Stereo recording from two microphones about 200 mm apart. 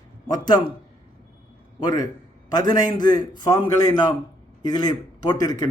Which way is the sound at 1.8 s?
20° left (ahead or behind).